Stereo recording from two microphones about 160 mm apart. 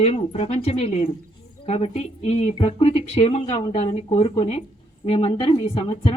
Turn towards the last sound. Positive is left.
turn(degrees=35)  # may be behind; listen again after turning